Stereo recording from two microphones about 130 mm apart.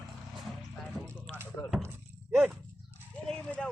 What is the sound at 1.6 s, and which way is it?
Speech, 20° left (ahead or behind).